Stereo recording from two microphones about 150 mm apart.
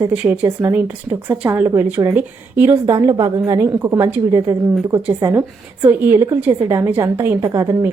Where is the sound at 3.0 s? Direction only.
25° right (ahead or behind).